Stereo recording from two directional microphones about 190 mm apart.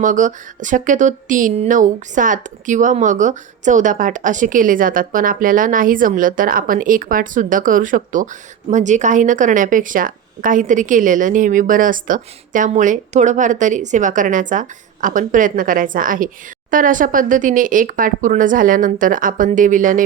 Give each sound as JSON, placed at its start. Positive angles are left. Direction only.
{"t": 0.0, "sound": "speech", "side_deg": -40}